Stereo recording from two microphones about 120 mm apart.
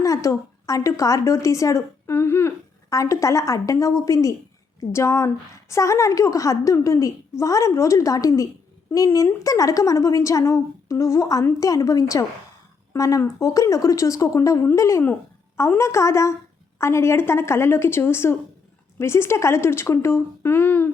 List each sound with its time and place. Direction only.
0.0 s a woman's voice: 25° left (ahead or behind)